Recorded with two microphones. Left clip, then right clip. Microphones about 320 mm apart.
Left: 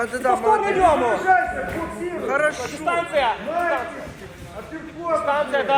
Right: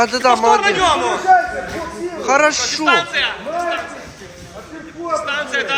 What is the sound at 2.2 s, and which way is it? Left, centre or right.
Speech, centre.